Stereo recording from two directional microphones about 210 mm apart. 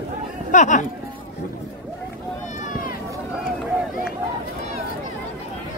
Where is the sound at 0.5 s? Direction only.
35° left (ahead or behind).